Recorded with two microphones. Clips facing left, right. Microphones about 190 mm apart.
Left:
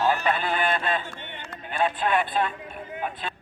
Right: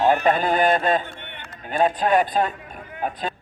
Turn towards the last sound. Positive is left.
turn(degrees=-40)  # may be behind; listen again after turning